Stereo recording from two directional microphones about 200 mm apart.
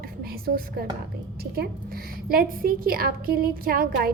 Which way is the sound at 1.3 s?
50° right (ahead or behind).